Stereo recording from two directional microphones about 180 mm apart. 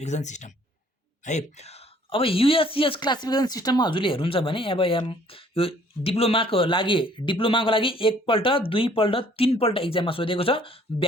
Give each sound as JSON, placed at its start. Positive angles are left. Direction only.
{"t": 0.0, "sound": "speech", "side_deg": 40}